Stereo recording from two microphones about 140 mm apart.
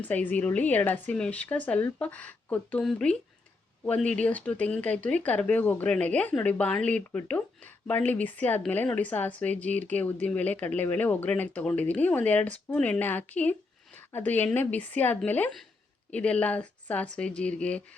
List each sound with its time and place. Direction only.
0.0 s speech: 10° left (ahead or behind)